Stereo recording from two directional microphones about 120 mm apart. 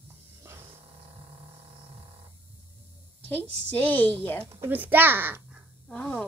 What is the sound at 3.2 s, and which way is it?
A woman's voice, 15° left (ahead or behind).